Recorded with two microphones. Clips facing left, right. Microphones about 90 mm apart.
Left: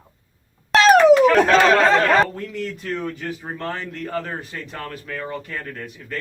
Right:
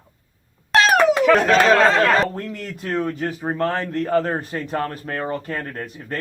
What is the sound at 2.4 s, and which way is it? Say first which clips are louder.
A man's voice: left 1 dB; 45° right (ahead or behind).